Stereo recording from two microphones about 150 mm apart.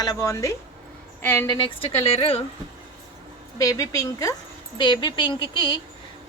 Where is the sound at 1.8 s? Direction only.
40° left (ahead or behind).